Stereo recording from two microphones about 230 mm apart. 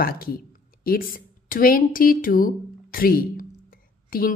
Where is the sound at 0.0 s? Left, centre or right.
Left.